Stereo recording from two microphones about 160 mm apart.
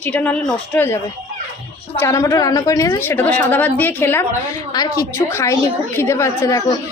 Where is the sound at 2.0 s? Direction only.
20° left (ahead or behind).